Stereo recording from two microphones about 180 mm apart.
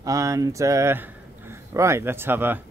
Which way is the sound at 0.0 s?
20° right (ahead or behind).